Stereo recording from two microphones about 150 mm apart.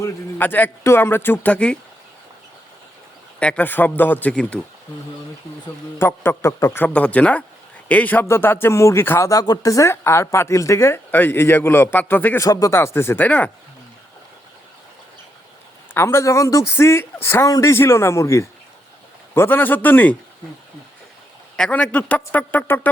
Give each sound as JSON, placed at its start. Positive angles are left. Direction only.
{"t": 0.0, "sound": "a man's voice", "side_deg": 15}
{"t": 3.4, "sound": "a man's voice", "side_deg": 10}
{"t": 6.0, "sound": "a man's voice", "side_deg": 15}
{"t": 16.0, "sound": "a man's voice", "side_deg": 15}
{"t": 21.5, "sound": "a man's voice", "side_deg": 5}